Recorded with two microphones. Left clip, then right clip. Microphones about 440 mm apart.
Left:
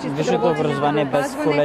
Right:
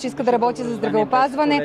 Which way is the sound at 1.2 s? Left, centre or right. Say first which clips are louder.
Right 3 dB; right.